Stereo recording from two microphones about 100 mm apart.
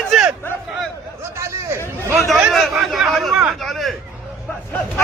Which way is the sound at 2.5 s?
Centre (ahead or behind).